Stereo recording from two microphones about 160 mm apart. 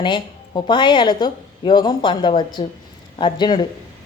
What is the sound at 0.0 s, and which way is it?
A woman's voice, 30° left (ahead or behind).